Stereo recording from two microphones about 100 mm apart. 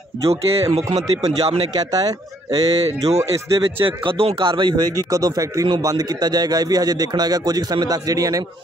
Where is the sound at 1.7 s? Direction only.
40° right (ahead or behind).